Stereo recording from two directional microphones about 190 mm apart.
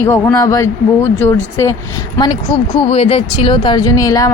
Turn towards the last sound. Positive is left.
turn(degrees=15)  # may be behind; listen again after turning